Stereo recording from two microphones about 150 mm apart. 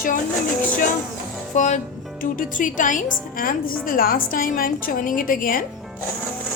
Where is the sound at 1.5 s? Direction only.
55° left (ahead or behind).